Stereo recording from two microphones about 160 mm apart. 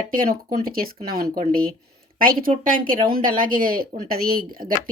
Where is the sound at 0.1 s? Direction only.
60° right (ahead or behind).